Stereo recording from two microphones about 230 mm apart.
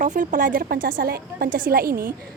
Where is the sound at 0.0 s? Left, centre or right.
Right.